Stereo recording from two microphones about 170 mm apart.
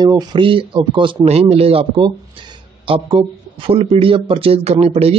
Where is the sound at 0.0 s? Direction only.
25° right (ahead or behind).